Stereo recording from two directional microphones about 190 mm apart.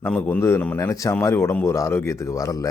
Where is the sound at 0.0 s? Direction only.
10° left (ahead or behind).